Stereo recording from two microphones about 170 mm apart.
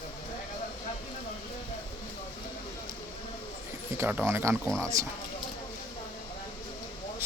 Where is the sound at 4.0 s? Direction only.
10° right (ahead or behind).